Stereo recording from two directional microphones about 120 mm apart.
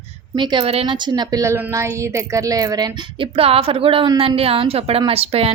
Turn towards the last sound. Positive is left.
turn(degrees=-55)  # may be behind; listen again after turning